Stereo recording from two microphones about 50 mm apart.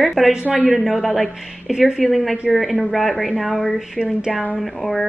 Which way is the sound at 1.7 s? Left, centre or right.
Centre.